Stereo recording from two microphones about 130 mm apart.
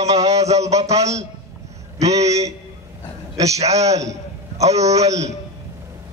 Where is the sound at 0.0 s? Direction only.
55° right (ahead or behind).